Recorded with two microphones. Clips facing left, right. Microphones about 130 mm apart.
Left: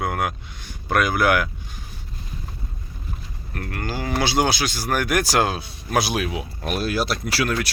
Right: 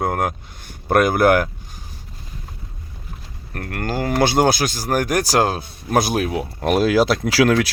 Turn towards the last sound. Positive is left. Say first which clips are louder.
# right 8 dB
turn(degrees=-90)